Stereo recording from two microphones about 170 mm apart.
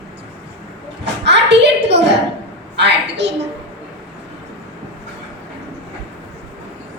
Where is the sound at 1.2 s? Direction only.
90° right.